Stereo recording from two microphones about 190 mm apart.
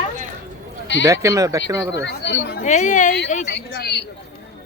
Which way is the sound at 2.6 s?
40° left (ahead or behind).